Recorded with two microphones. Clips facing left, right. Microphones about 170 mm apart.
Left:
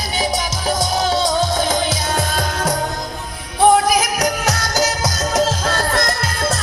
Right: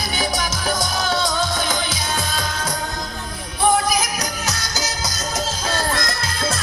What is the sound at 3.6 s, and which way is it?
Music, 70° left (ahead or behind).